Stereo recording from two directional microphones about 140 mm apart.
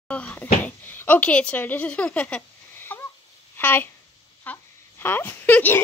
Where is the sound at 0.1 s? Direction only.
10° left (ahead or behind).